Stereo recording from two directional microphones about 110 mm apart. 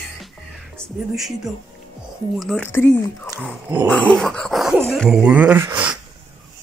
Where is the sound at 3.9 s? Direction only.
5° left (ahead or behind).